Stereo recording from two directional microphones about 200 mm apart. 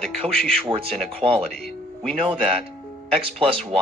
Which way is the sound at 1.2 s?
30° right (ahead or behind).